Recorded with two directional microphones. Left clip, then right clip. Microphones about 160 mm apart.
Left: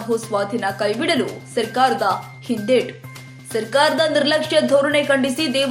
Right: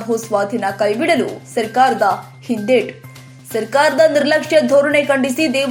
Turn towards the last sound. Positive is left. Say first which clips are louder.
# right 3 dB
turn(degrees=-15)  # may be behind; listen again after turning